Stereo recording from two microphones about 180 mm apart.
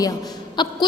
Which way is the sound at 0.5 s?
25° left (ahead or behind).